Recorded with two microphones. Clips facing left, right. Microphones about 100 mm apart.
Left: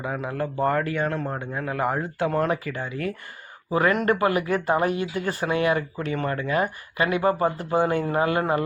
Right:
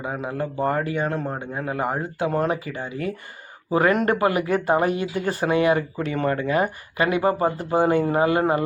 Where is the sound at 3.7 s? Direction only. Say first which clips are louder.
Right 2 dB; 30° right (ahead or behind).